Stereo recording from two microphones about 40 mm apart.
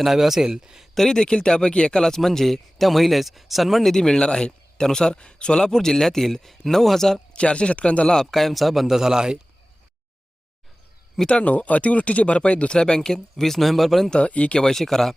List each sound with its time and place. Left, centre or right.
0.0 s a man's voice: centre
0.9 s speech: centre
3.9 s speech: centre
7.3 s speech: left
8.1 s a man's voice: centre
9.0 s a man's voice: centre
11.3 s speech: left; by 14.1 s centre
14.1 s speech: left
14.6 s speech: centre